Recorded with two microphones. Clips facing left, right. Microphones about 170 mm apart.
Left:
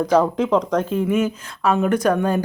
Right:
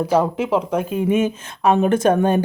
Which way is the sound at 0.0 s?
10° right (ahead or behind).